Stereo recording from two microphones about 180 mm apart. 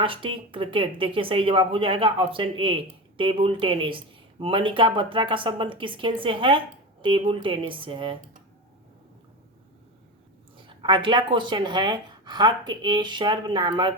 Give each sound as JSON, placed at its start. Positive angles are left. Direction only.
{"t": 0.0, "sound": "speech", "side_deg": -30}
{"t": 10.7, "sound": "speech", "side_deg": -25}